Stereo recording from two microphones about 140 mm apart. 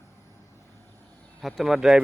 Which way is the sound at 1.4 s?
Centre (ahead or behind).